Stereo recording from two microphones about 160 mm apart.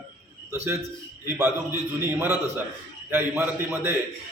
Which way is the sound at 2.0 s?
15° right (ahead or behind).